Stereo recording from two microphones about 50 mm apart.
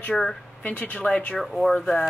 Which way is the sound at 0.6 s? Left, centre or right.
Left.